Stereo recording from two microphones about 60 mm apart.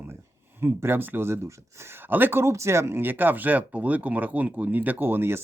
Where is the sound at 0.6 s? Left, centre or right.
Right.